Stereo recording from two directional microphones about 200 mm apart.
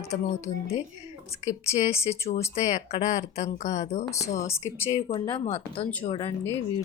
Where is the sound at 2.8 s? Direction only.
35° left (ahead or behind).